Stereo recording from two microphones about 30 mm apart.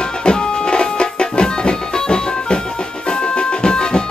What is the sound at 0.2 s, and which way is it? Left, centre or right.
Music, left.